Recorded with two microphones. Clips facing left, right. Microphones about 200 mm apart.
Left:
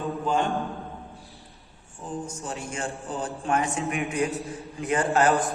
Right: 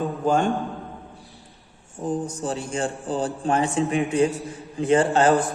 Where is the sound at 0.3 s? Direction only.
45° right (ahead or behind).